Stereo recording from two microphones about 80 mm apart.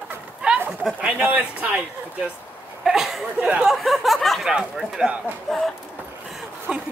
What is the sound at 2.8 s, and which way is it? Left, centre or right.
Chuckle, centre.